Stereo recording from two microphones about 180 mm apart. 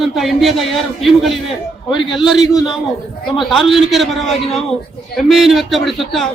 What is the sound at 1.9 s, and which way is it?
Speech, 25° left (ahead or behind).